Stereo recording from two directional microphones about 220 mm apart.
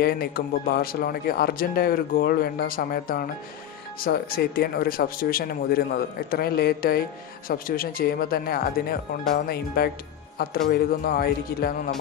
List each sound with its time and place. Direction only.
0.0 s speech: 45° left (ahead or behind)